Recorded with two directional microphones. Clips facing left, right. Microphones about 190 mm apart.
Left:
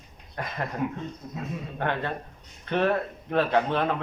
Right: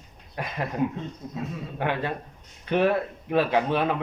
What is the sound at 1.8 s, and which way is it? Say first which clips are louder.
Speech: right 2 dB; 10° right (ahead or behind).